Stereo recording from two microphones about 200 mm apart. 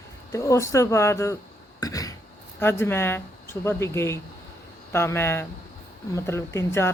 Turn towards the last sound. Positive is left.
turn(degrees=10)  # may be behind; listen again after turning